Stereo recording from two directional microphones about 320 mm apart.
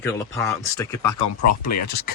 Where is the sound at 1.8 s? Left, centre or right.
Left.